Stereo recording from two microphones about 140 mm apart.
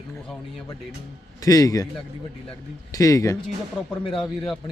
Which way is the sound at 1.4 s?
25° left (ahead or behind).